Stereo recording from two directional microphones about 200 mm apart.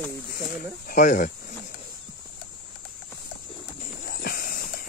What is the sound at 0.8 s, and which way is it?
Speech, 40° left (ahead or behind).